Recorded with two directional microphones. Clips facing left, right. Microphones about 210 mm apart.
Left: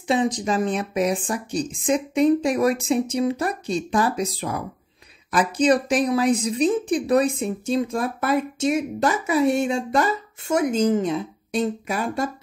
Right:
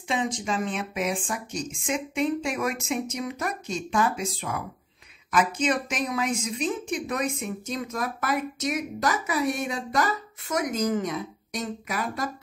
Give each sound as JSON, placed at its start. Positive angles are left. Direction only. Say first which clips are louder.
{"t": 0.1, "sound": "speech", "louder": "left 6 dB", "side_deg": 35}